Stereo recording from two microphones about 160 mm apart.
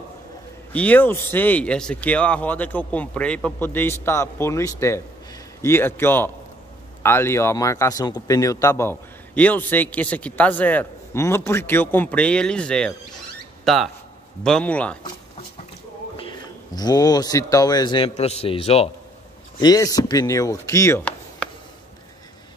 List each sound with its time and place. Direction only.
0.7 s speech: 10° left (ahead or behind)
16.7 s chopping: 25° left (ahead or behind)
18.1 s speech: 40° left (ahead or behind)
19.6 s chopping: 25° left (ahead or behind)